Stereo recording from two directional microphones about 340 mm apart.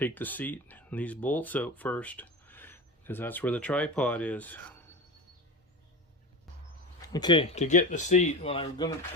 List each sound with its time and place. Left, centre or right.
0.0 s speech: centre
7.1 s speech: centre